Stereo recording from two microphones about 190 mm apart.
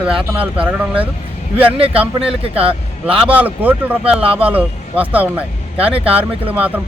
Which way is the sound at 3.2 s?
5° right (ahead or behind).